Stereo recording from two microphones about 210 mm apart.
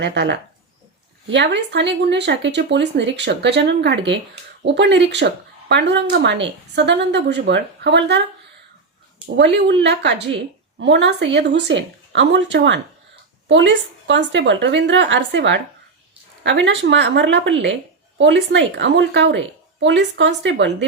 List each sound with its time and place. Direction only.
0.0 s speech: 55° right (ahead or behind)
9.4 s speech: 55° right (ahead or behind)